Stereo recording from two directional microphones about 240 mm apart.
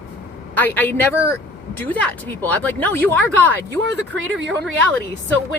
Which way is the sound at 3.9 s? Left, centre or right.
Right.